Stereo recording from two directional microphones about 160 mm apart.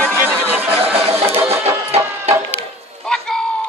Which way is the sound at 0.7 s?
35° right (ahead or behind).